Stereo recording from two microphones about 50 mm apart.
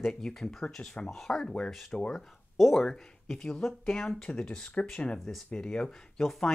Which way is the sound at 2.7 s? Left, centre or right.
Centre.